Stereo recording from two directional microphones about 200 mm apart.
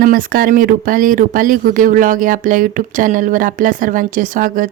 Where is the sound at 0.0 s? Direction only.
45° right (ahead or behind).